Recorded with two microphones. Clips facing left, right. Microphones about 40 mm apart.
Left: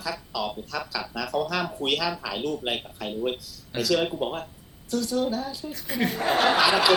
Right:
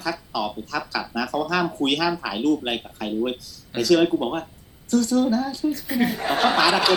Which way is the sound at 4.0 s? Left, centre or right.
Centre.